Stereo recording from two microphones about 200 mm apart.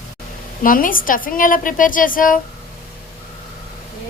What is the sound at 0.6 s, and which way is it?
A woman's voice, 45° left (ahead or behind).